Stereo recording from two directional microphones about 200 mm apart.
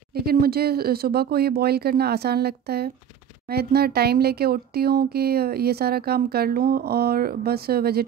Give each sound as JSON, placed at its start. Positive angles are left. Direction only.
{"t": 0.1, "sound": "speech", "side_deg": -50}